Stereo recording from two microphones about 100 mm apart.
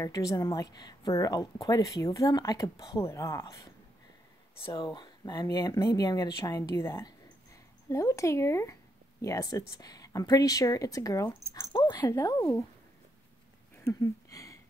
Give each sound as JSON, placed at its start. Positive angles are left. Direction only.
{"t": 0.0, "sound": "speech", "side_deg": 35}
{"t": 4.7, "sound": "speech", "side_deg": 50}
{"t": 6.5, "sound": "speech", "side_deg": 25}
{"t": 11.7, "sound": "speech", "side_deg": 45}
{"t": 12.1, "sound": "speech", "side_deg": 35}
{"t": 13.8, "sound": "a sound", "side_deg": 35}